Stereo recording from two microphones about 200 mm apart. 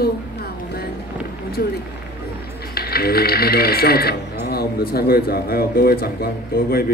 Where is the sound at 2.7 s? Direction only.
50° left (ahead or behind).